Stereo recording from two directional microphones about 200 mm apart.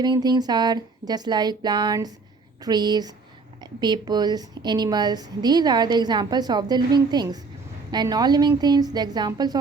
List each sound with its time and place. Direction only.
0.0 s a woman's voice: 20° right (ahead or behind)